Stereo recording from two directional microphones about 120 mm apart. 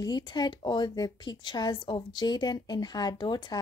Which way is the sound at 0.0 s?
35° left (ahead or behind).